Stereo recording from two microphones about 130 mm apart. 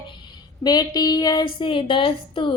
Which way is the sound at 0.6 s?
30° left (ahead or behind).